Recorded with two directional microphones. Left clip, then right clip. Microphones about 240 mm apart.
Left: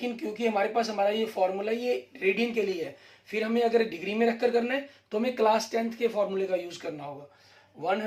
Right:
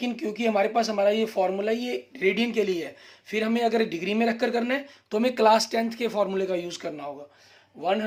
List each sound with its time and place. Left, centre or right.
0.0 s speech: right